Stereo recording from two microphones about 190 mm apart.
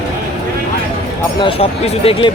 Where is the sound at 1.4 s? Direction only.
30° left (ahead or behind).